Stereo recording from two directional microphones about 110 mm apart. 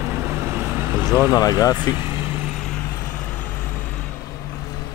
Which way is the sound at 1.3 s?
35° left (ahead or behind).